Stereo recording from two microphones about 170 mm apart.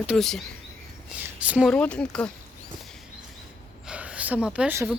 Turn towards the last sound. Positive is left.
turn(degrees=-10)  # may be behind; listen again after turning